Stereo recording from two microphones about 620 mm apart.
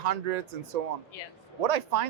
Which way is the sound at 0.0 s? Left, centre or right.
Right.